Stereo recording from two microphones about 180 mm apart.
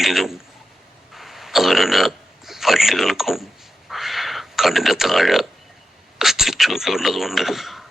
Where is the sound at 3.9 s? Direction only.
Centre (ahead or behind).